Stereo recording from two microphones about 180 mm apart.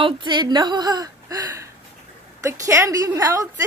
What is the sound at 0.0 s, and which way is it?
A woman's voice, 25° right (ahead or behind).